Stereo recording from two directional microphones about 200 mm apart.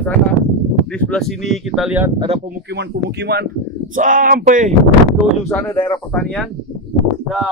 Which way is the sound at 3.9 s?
40° right (ahead or behind).